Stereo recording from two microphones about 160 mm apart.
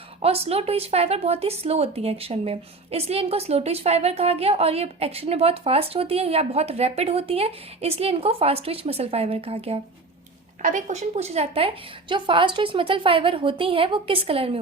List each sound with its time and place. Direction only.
0.2 s a woman's voice: 40° right (ahead or behind)
10.6 s a woman's voice: 50° right (ahead or behind); by 14.6 s 35° right (ahead or behind)